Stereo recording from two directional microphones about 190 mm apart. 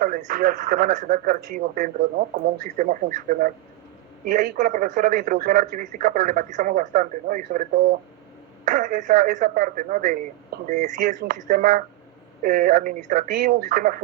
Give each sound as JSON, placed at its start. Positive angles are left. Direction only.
{"t": 0.0, "sound": "speech", "side_deg": -45}
{"t": 8.7, "sound": "speech", "side_deg": -40}